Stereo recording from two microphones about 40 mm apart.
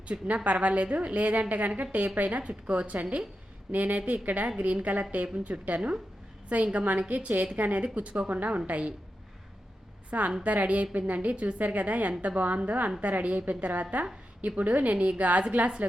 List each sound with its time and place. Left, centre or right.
0.1 s a woman's voice: right
10.1 s a woman's voice: right